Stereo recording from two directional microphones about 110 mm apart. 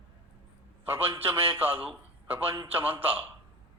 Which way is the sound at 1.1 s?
20° right (ahead or behind).